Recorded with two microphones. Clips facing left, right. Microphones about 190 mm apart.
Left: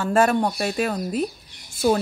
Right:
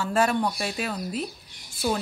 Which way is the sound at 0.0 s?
50° left (ahead or behind).